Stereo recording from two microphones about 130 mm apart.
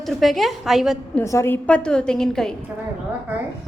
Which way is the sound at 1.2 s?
20° left (ahead or behind).